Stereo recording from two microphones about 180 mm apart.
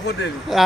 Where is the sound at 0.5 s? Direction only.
Centre (ahead or behind).